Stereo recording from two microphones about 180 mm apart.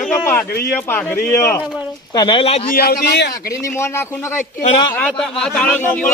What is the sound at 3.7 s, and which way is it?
Speech, 15° left (ahead or behind).